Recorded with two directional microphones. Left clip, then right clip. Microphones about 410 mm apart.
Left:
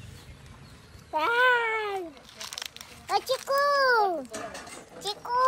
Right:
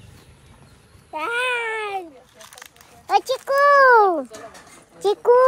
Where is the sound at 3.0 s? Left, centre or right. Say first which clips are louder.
Right 7 dB; centre.